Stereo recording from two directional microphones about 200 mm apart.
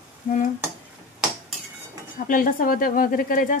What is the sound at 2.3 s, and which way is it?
Stir, 45° left (ahead or behind).